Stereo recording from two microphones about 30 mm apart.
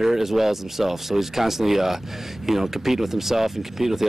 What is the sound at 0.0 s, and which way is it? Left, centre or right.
Speech, centre.